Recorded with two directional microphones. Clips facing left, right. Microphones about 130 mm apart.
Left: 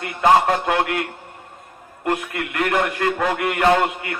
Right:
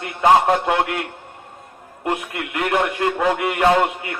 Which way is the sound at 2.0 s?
20° right (ahead or behind).